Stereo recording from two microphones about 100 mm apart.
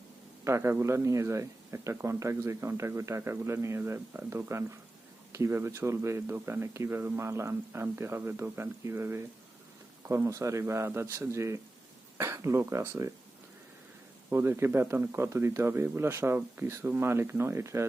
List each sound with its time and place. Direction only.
0.4 s speech: 25° right (ahead or behind)
14.3 s speech: 25° right (ahead or behind)